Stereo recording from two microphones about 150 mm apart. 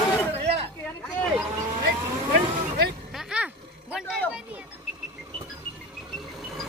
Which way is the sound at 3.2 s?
5° right (ahead or behind).